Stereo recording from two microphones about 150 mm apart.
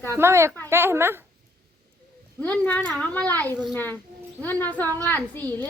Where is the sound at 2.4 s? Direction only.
10° left (ahead or behind).